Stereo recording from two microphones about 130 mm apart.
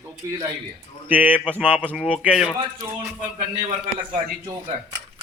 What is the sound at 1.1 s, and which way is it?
A man's voice, 15° right (ahead or behind).